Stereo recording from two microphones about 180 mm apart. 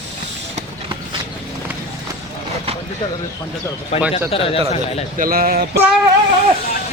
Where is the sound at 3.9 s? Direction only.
35° left (ahead or behind).